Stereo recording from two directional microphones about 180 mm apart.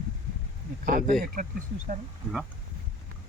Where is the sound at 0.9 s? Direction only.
50° right (ahead or behind).